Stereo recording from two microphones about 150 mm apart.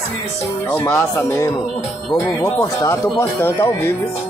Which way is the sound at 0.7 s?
15° left (ahead or behind).